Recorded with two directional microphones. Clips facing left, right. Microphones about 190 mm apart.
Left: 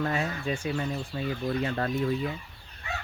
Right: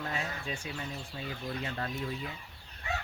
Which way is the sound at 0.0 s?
60° left (ahead or behind).